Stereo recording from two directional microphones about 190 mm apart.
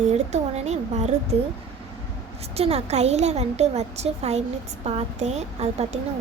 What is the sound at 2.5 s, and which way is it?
A woman's voice, 30° right (ahead or behind).